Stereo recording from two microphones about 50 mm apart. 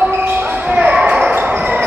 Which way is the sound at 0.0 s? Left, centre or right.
Right.